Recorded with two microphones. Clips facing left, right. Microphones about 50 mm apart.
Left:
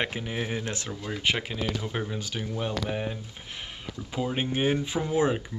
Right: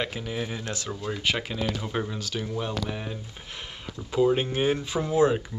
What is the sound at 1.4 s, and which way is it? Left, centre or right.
Speech, centre.